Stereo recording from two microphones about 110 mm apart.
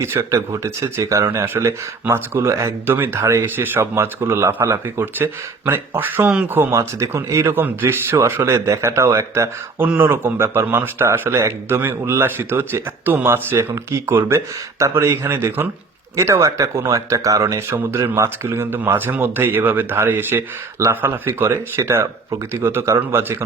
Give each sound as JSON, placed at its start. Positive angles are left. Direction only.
{"t": 0.0, "sound": "speech", "side_deg": -25}